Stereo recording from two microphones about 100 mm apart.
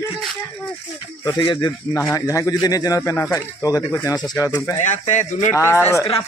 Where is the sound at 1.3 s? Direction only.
50° left (ahead or behind).